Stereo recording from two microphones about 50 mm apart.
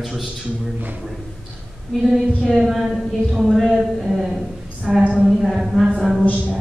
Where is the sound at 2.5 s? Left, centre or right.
Centre.